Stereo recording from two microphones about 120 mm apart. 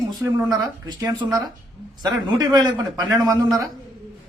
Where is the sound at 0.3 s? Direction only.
25° right (ahead or behind).